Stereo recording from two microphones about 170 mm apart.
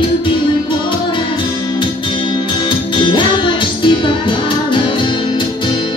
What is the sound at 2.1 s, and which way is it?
Music, 30° left (ahead or behind).